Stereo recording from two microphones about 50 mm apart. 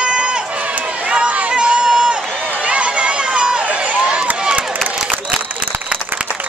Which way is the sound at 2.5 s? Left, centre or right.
Right.